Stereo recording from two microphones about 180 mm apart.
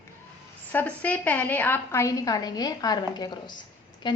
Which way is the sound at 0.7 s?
10° left (ahead or behind).